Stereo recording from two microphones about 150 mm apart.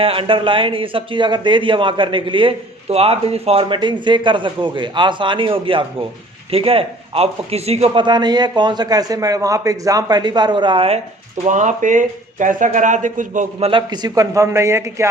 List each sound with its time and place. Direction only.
0.0 s a man's voice: 35° right (ahead or behind)
8.0 s a man's voice: 30° right (ahead or behind)
11.4 s speech: 55° right (ahead or behind)
13.6 s a man's voice: 35° right (ahead or behind); by 15.1 s 20° right (ahead or behind)